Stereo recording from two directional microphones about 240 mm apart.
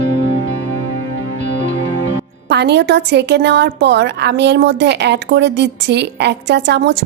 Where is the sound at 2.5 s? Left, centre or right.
Right.